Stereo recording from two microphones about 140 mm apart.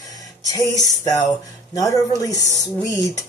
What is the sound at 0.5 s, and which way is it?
Speech, 25° left (ahead or behind).